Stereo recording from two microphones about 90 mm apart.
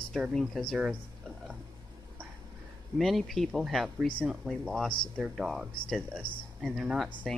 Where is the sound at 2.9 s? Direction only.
Centre (ahead or behind).